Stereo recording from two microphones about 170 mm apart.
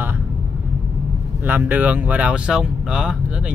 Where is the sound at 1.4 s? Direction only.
10° right (ahead or behind).